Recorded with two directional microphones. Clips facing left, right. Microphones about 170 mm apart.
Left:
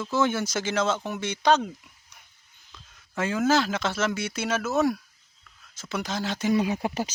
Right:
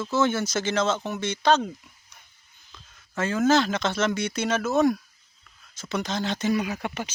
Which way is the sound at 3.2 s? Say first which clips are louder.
Right 2 dB; 10° left (ahead or behind).